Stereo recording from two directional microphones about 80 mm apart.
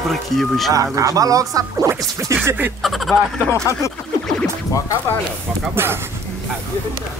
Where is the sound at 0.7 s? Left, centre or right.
Right.